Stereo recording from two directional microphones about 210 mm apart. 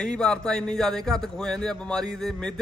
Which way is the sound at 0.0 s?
5° left (ahead or behind).